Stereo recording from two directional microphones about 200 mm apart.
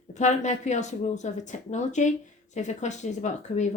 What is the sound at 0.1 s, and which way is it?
Speech, 35° left (ahead or behind).